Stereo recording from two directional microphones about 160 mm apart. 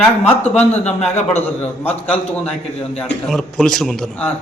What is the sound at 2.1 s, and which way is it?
A woman's voice, 10° left (ahead or behind).